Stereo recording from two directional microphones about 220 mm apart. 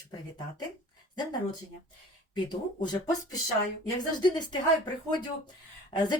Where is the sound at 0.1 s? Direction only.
20° left (ahead or behind).